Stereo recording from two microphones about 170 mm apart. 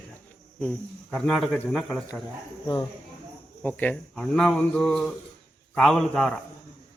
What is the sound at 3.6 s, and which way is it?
Speech, 10° left (ahead or behind).